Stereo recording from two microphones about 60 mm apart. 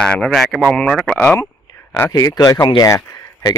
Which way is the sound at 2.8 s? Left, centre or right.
Left.